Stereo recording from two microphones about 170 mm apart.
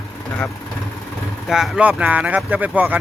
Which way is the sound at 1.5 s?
Centre (ahead or behind).